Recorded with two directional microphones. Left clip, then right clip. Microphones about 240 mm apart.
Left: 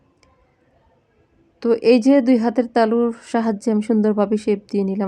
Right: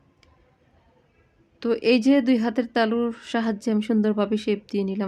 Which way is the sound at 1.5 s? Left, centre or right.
Centre.